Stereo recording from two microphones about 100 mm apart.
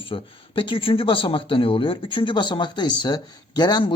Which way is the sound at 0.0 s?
60° left (ahead or behind).